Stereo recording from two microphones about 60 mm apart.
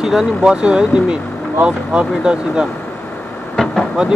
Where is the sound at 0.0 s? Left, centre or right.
Centre.